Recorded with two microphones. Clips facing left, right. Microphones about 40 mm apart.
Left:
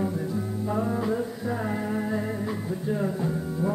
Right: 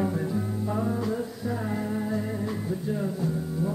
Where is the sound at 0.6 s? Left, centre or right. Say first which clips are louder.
Left 3 dB; centre.